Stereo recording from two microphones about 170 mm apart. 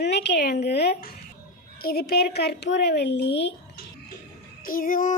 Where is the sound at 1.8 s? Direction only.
65° left (ahead or behind); by 3.5 s 90° left.